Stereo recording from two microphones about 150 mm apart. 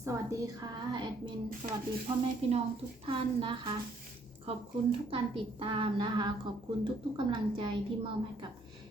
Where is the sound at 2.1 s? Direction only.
40° right (ahead or behind).